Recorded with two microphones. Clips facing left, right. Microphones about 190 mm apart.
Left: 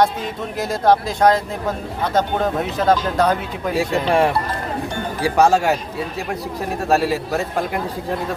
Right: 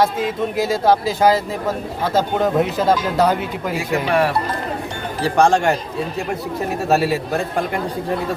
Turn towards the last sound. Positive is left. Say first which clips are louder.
# right 1 dB
turn(degrees=0)  # may be behind; listen again after turning